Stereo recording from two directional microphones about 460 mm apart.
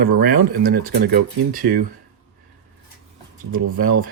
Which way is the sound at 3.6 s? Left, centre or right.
Centre.